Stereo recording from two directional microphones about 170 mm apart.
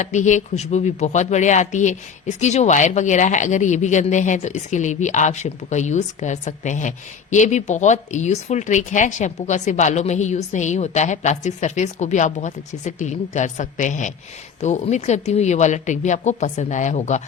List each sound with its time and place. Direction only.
0.0 s speech: 45° left (ahead or behind)